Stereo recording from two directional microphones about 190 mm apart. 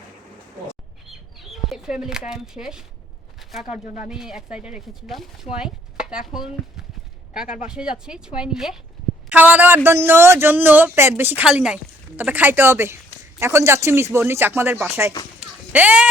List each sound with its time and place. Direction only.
1.0 s chicken: centre (ahead or behind)
3.7 s speech: 40° left (ahead or behind)
4.1 s speech: 5° right (ahead or behind)